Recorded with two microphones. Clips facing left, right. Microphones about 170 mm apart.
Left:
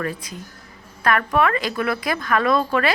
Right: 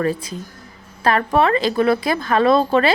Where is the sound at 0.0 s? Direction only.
30° right (ahead or behind).